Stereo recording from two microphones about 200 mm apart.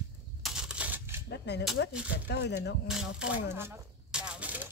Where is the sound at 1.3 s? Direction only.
55° left (ahead or behind).